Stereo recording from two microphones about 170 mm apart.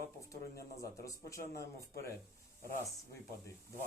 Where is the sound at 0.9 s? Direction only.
20° left (ahead or behind).